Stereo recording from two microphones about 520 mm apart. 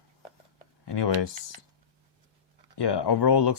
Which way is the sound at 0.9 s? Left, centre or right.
Left.